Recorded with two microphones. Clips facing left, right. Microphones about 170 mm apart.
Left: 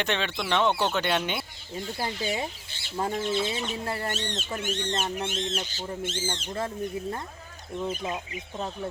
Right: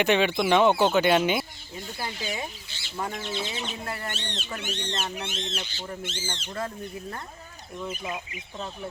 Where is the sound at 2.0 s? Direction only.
25° left (ahead or behind).